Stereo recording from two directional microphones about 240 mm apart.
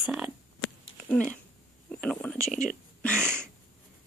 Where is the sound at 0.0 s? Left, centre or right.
Centre.